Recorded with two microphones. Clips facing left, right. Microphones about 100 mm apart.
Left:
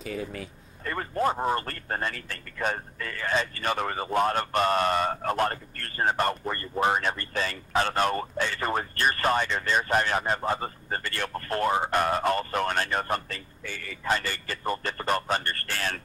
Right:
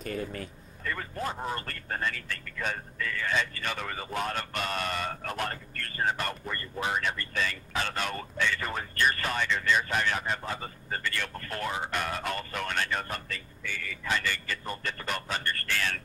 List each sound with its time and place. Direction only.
0.0 s speech: centre (ahead or behind)
0.8 s speech: 40° left (ahead or behind)